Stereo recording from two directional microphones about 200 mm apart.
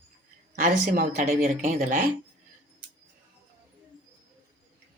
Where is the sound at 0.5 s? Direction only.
40° right (ahead or behind).